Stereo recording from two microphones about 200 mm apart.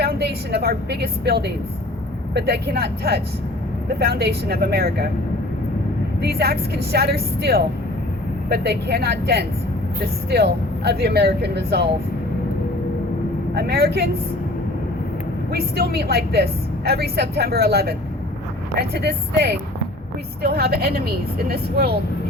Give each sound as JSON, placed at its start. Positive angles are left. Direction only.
{"t": 0.0, "sound": "a woman's voice", "side_deg": -55}
{"t": 6.2, "sound": "a woman's voice", "side_deg": -50}
{"t": 13.6, "sound": "a woman's voice", "side_deg": -50}
{"t": 15.5, "sound": "a woman's voice", "side_deg": -55}